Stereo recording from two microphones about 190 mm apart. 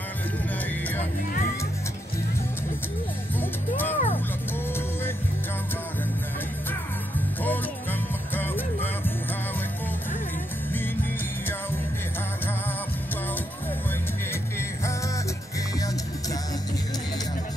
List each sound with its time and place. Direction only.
3.3 s music: 10° left (ahead or behind)
3.9 s music: 35° left (ahead or behind)
8.4 s music: 10° left (ahead or behind)